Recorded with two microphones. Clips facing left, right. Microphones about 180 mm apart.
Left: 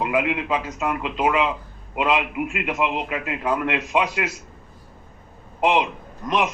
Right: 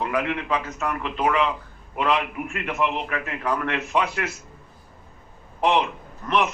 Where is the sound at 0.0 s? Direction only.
15° left (ahead or behind).